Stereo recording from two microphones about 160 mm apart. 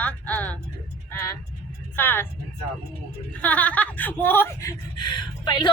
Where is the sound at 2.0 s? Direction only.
15° left (ahead or behind).